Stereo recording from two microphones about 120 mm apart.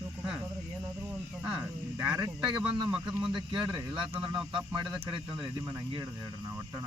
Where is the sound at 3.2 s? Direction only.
40° right (ahead or behind).